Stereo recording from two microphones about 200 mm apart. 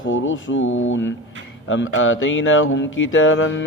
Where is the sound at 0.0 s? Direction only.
75° left (ahead or behind).